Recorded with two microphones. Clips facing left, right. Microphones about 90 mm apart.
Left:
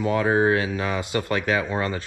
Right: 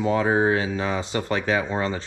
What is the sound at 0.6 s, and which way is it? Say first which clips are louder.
A man's voice: even; 30° right (ahead or behind).